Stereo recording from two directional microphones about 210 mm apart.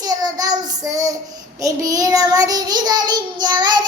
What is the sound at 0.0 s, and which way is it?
Child singing, 20° right (ahead or behind).